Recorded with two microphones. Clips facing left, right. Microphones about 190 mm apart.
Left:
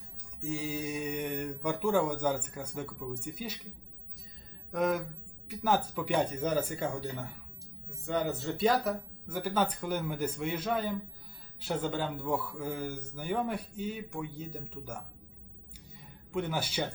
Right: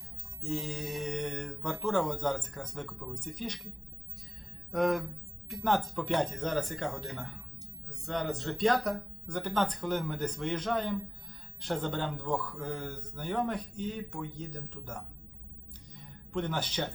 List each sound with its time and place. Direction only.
0.4 s speech: 10° left (ahead or behind)
4.7 s speech: centre (ahead or behind)
16.3 s speech: 10° left (ahead or behind)